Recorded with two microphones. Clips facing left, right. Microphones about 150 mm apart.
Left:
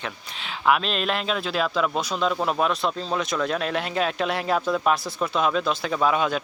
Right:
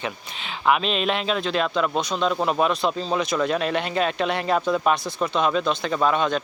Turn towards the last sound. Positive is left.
turn(degrees=5)  # may be behind; listen again after turning